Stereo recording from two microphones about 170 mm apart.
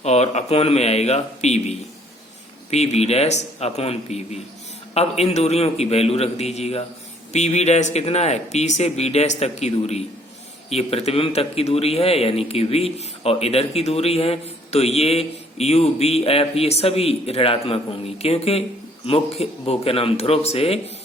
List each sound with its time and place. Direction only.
0.0 s a man's voice: 40° left (ahead or behind)
2.6 s a man's voice: 40° left (ahead or behind)